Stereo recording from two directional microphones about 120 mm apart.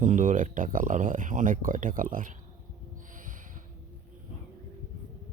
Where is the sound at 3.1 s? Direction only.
90° right.